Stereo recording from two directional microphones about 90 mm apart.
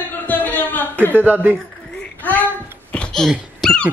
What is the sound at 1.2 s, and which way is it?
Speech, 20° right (ahead or behind).